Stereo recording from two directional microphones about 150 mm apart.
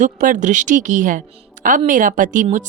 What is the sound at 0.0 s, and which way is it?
Speech, 55° right (ahead or behind).